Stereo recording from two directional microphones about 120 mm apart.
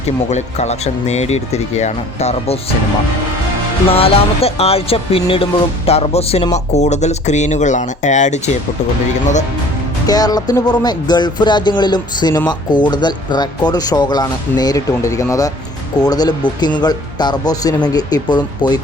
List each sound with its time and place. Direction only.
0.3 s speech: 70° left (ahead or behind)
3.9 s speech: 55° left (ahead or behind)
6.5 s speech: 70° left (ahead or behind); by 8.4 s 90° left
10.1 s speech: 30° left (ahead or behind)